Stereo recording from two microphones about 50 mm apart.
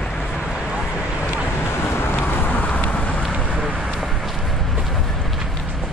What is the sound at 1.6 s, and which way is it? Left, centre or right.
Vehicle, left.